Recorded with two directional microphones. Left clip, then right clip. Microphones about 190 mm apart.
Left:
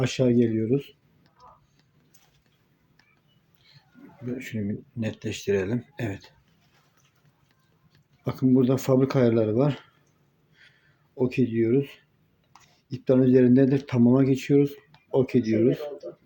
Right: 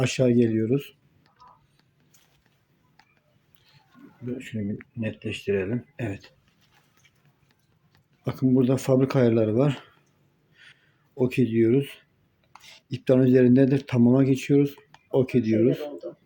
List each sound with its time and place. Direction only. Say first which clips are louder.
0.0 s speech: right 1 dB; 20° right (ahead or behind)
4.3 s speech: left 1 dB; 5° right (ahead or behind)
8.2 s speech: left 1 dB; 10° right (ahead or behind)
10.6 s a sound: right 4 dB; 20° right (ahead or behind)
11.1 s speech: right 1 dB; 30° right (ahead or behind)